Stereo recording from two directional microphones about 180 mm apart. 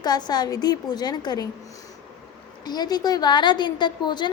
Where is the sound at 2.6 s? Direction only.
20° left (ahead or behind).